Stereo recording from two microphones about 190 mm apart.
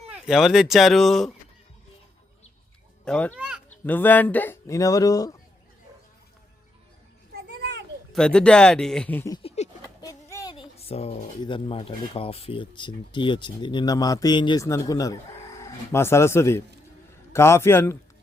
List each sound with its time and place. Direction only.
0.1 s speech: centre (ahead or behind)
3.0 s a child's voice: 5° left (ahead or behind)
3.3 s speech: 5° right (ahead or behind)
3.8 s speech: 10° left (ahead or behind)
7.3 s a sound: 60° right (ahead or behind)
8.1 s speech: 5° left (ahead or behind)
9.3 s a sound: 25° left (ahead or behind)
10.5 s speech: 30° left (ahead or behind); by 17.9 s 15° left (ahead or behind)